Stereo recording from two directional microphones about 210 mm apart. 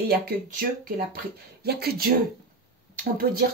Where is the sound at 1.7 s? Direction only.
50° right (ahead or behind).